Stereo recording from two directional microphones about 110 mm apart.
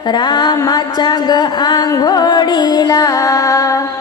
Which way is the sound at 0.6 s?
35° left (ahead or behind).